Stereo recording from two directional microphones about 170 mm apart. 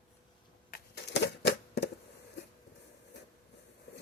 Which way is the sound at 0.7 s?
70° left (ahead or behind).